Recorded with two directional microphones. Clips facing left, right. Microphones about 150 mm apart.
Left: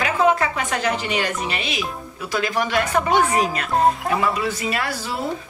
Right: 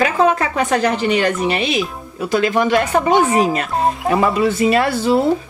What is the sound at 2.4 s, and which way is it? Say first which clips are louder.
Speech: right 5 dB; 20° right (ahead or behind).